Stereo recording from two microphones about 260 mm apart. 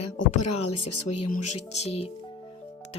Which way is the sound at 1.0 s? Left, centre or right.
Left.